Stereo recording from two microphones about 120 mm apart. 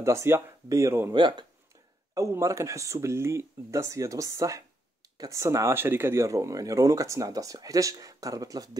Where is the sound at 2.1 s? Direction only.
25° right (ahead or behind).